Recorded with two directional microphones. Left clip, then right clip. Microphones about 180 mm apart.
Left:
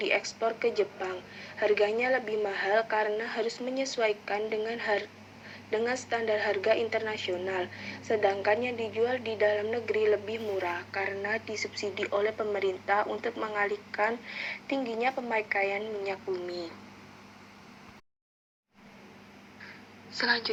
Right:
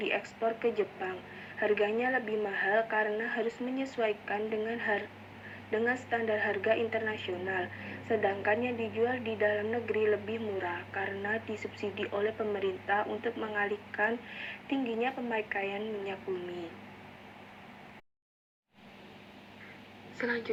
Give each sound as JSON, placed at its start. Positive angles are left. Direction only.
{"t": 0.0, "sound": "a woman's voice", "side_deg": 30}